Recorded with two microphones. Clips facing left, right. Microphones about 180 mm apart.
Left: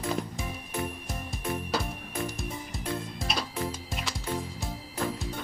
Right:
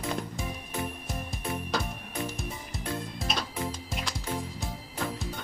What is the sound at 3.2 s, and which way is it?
Music, 5° left (ahead or behind).